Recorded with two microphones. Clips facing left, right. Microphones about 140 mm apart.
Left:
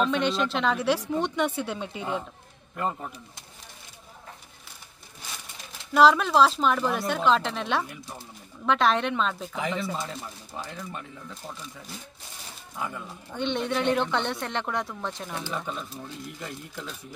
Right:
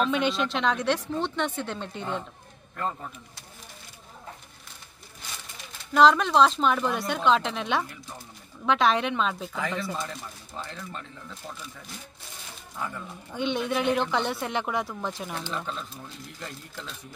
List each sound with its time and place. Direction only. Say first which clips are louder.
0.0 s speech: even; centre (ahead or behind)
5.9 s speech: even; 5° left (ahead or behind)
9.6 s speech: left 2 dB; 20° left (ahead or behind)
12.7 s speech: left 1 dB; 10° left (ahead or behind)
13.3 s speech: even; 5° right (ahead or behind)
15.3 s speech: left 1 dB; 10° left (ahead or behind)